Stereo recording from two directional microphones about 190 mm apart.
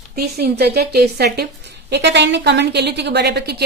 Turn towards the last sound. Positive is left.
turn(degrees=-60)  # may be behind; listen again after turning